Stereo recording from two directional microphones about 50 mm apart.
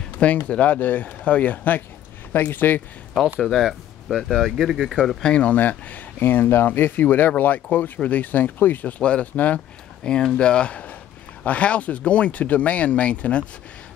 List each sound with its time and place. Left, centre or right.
0.2 s speech: left
3.3 s speech: centre
5.2 s speech: left
10.0 s speech: centre